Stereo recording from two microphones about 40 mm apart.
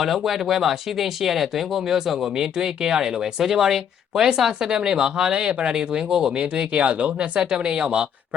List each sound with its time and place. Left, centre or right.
0.0 s speech: centre; by 7.3 s right
7.3 s speech: centre
7.8 s speech: right